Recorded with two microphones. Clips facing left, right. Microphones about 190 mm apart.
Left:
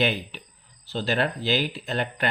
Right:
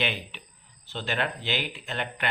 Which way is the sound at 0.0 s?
40° left (ahead or behind).